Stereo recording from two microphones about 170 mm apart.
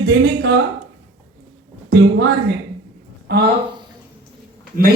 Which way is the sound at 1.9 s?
85° right.